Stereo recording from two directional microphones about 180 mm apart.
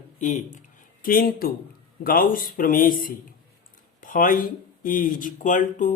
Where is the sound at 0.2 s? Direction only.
45° left (ahead or behind).